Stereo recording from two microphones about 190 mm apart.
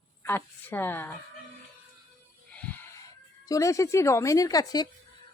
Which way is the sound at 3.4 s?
15° left (ahead or behind).